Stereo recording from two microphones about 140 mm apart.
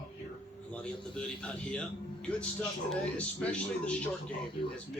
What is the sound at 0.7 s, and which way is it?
Speech, 5° left (ahead or behind).